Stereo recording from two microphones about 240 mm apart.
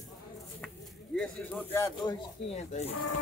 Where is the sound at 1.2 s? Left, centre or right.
Centre.